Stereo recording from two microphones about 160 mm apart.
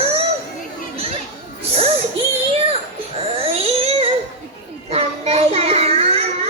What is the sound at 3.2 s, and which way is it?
Baby cry, 35° right (ahead or behind).